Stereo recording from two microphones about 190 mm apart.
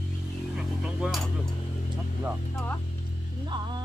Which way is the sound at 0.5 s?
5° right (ahead or behind).